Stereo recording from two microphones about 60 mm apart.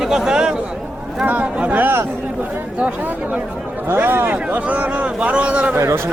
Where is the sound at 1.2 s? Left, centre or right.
Right.